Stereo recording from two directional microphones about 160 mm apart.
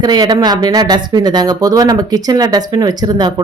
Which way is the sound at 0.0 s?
25° right (ahead or behind).